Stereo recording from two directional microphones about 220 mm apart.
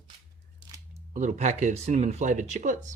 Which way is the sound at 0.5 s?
15° right (ahead or behind).